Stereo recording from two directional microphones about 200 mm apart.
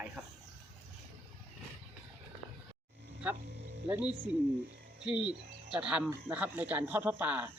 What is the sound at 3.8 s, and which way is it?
Speech, 5° right (ahead or behind).